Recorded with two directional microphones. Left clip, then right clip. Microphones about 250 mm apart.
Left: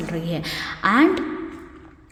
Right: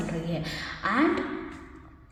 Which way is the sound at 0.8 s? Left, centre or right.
Left.